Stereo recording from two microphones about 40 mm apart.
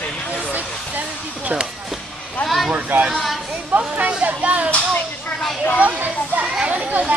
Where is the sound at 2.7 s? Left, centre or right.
Right.